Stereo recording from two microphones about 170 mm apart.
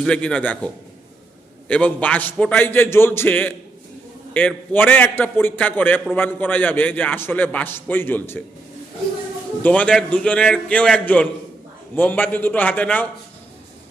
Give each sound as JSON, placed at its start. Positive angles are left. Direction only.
{"t": 0.0, "sound": "a man's voice", "side_deg": 5}
{"t": 9.6, "sound": "a man's voice", "side_deg": 10}